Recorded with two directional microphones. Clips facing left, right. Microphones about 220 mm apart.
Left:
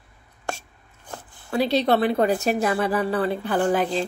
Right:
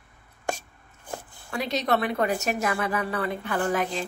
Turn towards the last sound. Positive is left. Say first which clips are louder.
# left 5 dB
turn(degrees=30)  # may be behind; listen again after turning